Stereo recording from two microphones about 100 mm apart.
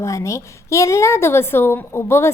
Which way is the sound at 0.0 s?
30° left (ahead or behind).